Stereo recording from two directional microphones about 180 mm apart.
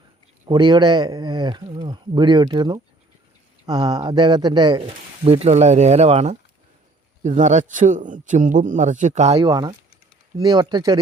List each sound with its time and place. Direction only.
0.4 s a man's voice: 25° right (ahead or behind)
9.4 s speech: 20° right (ahead or behind)